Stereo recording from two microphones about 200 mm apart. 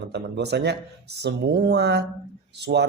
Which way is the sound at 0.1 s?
55° right (ahead or behind).